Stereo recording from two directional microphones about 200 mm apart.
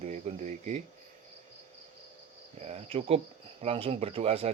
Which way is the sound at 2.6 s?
35° right (ahead or behind).